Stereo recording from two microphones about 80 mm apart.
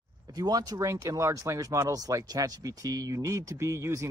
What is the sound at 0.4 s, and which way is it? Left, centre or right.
Speech, right.